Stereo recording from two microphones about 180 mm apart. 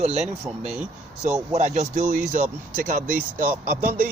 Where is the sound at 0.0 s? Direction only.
35° right (ahead or behind).